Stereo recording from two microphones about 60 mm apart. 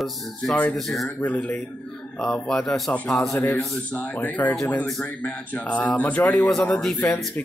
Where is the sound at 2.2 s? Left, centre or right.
Centre.